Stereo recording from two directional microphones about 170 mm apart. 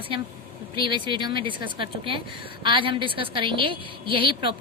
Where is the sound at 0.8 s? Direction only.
30° right (ahead or behind).